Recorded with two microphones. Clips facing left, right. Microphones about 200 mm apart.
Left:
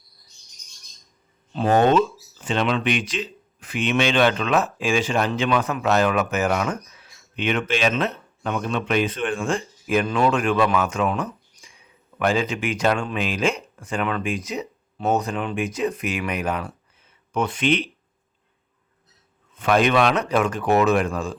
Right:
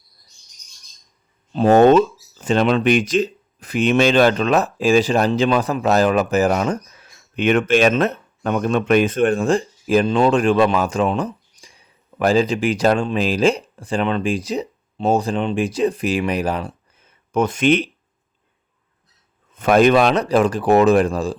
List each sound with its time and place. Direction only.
1.5 s speech: 40° right (ahead or behind)
17.0 s a sound: 45° right (ahead or behind)
19.5 s speech: 45° right (ahead or behind)